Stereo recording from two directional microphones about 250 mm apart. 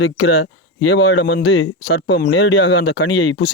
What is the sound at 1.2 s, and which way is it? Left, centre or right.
Speech, left.